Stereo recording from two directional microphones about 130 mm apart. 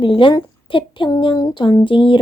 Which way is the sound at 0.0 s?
40° left (ahead or behind).